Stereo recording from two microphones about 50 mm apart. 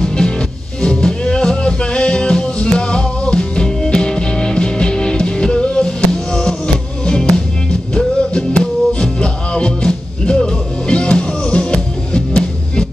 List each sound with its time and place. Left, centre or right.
0.0 s music: centre